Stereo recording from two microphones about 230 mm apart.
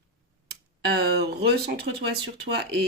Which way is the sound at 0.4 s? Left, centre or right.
Right.